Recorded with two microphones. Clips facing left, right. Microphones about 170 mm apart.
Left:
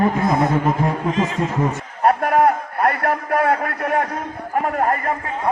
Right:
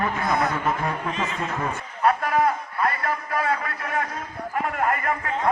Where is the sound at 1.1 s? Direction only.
90° left.